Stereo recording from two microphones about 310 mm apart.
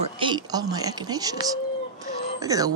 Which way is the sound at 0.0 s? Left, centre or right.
Centre.